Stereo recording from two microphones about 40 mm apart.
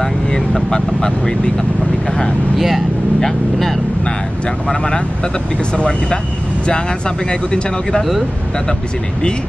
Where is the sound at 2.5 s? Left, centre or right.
Centre.